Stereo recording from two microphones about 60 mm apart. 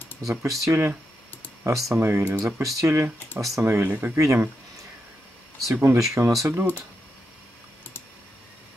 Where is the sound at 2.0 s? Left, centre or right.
Right.